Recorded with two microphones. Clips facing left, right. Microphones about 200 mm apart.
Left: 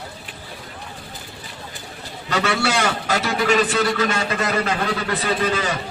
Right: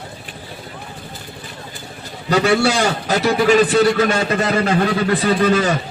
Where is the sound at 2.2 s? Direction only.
35° right (ahead or behind).